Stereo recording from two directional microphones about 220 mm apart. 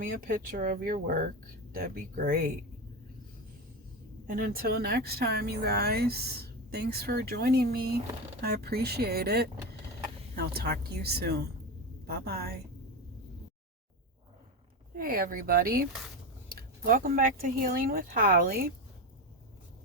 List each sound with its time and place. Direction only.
0.0 s speech: 40° right (ahead or behind)
4.3 s speech: 40° right (ahead or behind)
14.9 s speech: 40° right (ahead or behind)